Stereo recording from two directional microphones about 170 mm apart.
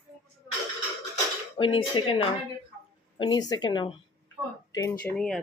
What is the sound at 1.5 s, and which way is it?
Speech, 30° left (ahead or behind).